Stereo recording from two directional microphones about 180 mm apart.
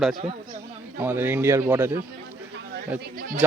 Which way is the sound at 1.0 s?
10° right (ahead or behind).